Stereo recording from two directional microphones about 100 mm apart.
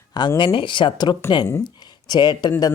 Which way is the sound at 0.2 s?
50° left (ahead or behind).